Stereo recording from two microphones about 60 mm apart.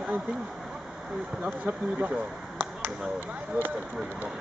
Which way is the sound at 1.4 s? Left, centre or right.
Right.